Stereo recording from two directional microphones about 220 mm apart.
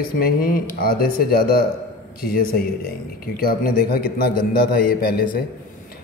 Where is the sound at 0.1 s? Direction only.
40° left (ahead or behind).